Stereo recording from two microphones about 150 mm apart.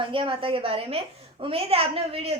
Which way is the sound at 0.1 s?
35° right (ahead or behind).